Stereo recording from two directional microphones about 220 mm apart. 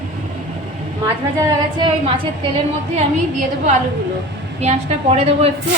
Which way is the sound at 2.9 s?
30° right (ahead or behind).